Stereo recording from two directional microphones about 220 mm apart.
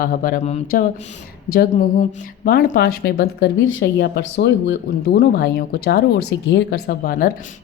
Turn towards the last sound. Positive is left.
turn(degrees=40)  # may be behind; listen again after turning